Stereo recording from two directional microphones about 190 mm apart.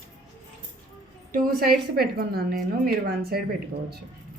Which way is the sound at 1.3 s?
50° right (ahead or behind).